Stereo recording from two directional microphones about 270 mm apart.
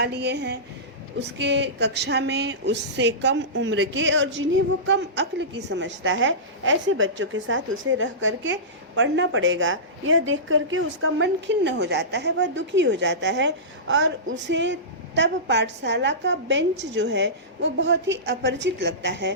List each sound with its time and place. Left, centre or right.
0.0 s a woman's voice: right